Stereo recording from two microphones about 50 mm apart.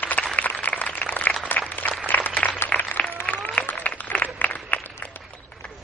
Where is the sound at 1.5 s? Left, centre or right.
Left.